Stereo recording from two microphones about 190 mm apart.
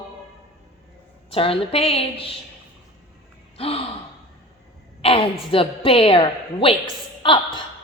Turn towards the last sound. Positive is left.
turn(degrees=25)  # may be behind; listen again after turning